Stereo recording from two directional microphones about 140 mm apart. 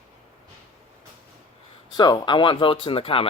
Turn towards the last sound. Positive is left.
turn(degrees=40)  # may be behind; listen again after turning